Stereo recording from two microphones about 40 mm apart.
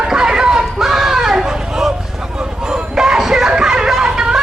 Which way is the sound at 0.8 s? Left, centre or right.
Centre.